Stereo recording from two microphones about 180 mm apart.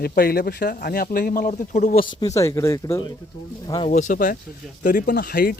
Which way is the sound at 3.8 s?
40° left (ahead or behind).